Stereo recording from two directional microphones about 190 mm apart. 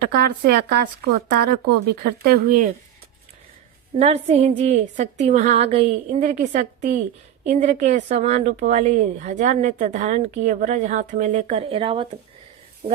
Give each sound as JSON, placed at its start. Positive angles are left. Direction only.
{"t": 0.0, "sound": "speech", "side_deg": -55}
{"t": 3.9, "sound": "speech", "side_deg": -35}